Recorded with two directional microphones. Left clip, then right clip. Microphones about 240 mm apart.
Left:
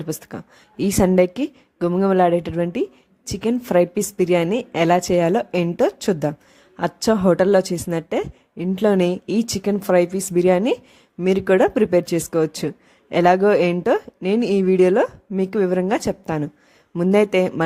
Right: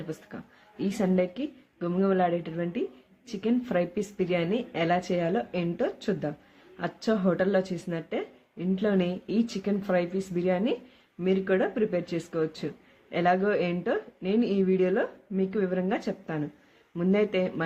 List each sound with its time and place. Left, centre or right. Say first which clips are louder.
0.1 s speech: left 9 dB; left